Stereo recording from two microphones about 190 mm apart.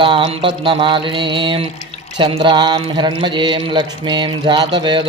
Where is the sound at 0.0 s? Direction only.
25° right (ahead or behind).